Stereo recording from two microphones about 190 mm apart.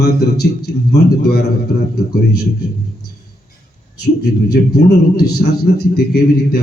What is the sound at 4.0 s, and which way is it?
A man's voice, 55° left (ahead or behind).